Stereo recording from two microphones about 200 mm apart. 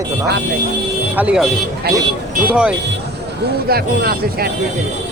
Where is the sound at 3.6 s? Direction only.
50° right (ahead or behind).